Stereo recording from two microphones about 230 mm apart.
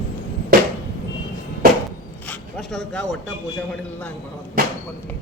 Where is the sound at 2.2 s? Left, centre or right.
Centre.